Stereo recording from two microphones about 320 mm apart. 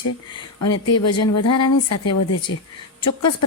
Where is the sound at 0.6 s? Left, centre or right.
Left.